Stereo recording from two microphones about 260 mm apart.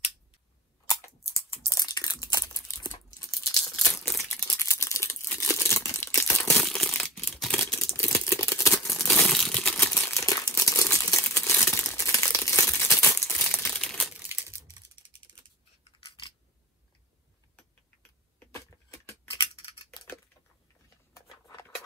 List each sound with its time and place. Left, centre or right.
0.8 s a sound: centre
4.2 s crumpling: centre
7.2 s a sound: centre
13.6 s crumpling: centre
14.7 s typing: centre
18.4 s scissors: centre